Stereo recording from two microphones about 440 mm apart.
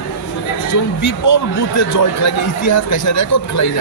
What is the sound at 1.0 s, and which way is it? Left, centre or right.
A man's voice, left.